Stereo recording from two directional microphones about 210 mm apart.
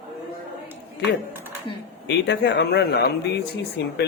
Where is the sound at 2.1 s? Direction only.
55° left (ahead or behind).